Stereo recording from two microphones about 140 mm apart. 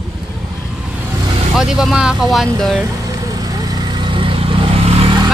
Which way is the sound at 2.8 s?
25° right (ahead or behind).